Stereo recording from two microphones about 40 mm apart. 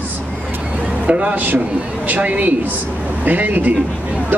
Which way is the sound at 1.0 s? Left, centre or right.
Right.